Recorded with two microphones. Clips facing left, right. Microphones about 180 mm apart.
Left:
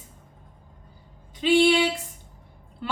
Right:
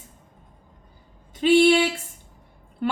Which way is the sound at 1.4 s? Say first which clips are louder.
Right 3 dB; 45° right (ahead or behind).